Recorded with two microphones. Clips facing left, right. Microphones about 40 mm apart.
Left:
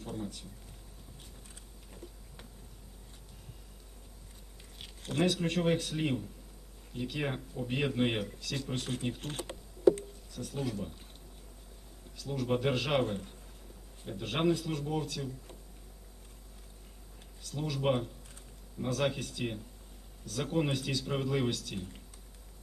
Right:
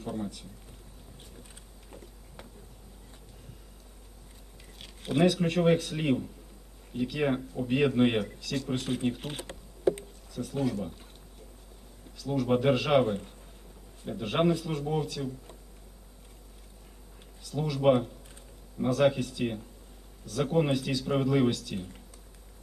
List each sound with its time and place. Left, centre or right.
0.0 s speech: centre
1.9 s a sound: centre
5.2 s speech: centre
12.3 s speech: centre
17.5 s speech: centre